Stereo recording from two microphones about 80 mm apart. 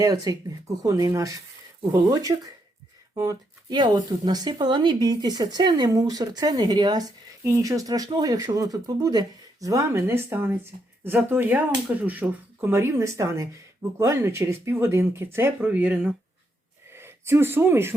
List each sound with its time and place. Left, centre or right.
0.0 s speech: right
3.7 s speech: right
5.9 s speech: right
7.4 s speech: right
10.1 s speech: right